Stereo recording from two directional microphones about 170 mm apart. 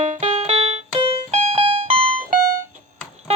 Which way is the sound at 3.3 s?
40° right (ahead or behind).